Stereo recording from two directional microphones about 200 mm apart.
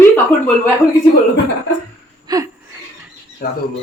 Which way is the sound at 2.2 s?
15° right (ahead or behind).